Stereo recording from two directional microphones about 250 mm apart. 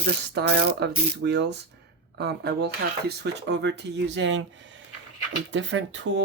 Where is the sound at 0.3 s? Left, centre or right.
Right.